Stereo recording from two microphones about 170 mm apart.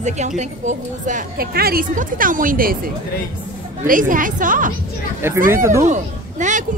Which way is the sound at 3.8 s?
50° right (ahead or behind).